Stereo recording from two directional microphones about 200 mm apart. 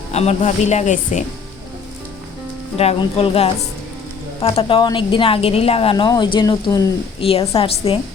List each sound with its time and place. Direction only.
0.1 s speech: 35° left (ahead or behind)
2.7 s a woman's voice: 30° left (ahead or behind)